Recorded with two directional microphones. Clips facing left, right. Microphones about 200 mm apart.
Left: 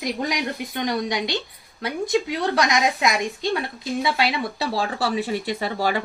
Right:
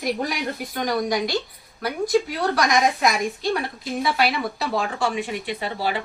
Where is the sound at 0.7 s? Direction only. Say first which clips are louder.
Right 2 dB; 25° left (ahead or behind); by 6.0 s 40° left (ahead or behind).